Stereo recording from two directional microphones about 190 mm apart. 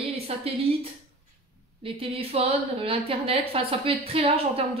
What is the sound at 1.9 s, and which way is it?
A woman's voice, 30° right (ahead or behind).